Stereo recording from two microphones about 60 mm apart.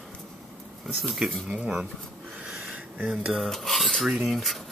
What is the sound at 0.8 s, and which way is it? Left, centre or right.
Cutlery, centre.